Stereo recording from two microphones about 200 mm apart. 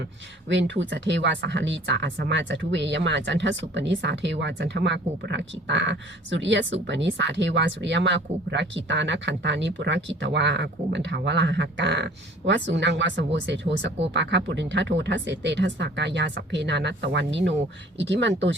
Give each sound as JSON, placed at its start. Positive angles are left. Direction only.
{"t": 0.4, "sound": "speech", "side_deg": -65}